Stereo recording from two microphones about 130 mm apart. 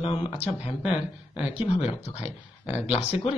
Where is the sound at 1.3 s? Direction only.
10° right (ahead or behind).